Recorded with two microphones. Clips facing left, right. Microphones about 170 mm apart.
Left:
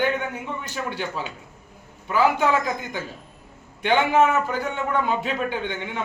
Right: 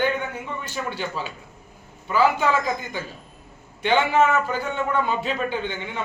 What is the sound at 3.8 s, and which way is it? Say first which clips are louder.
A man's voice: left 1 dB; 15° left (ahead or behind).